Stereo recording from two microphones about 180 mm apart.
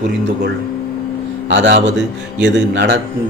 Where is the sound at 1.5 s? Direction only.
85° right.